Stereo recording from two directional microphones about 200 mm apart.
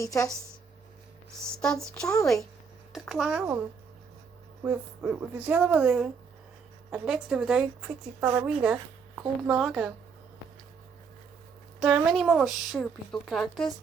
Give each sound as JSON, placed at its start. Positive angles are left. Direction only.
{"t": 0.0, "sound": "speech", "side_deg": 15}
{"t": 1.6, "sound": "a woman's voice", "side_deg": 5}
{"t": 4.6, "sound": "a woman's voice", "side_deg": -10}
{"t": 11.8, "sound": "a woman's voice", "side_deg": -5}